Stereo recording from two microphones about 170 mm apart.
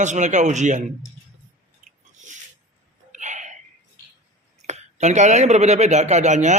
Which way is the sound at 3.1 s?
45° right (ahead or behind).